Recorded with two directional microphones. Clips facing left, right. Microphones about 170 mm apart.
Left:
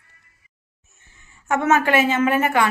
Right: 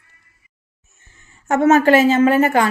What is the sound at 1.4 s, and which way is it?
A woman's voice, 40° right (ahead or behind).